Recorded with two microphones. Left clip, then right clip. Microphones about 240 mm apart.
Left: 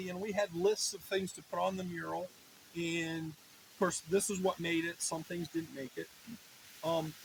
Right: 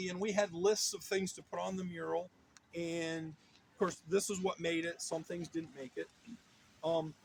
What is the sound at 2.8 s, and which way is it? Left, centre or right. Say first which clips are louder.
Speech: left 2 dB; left.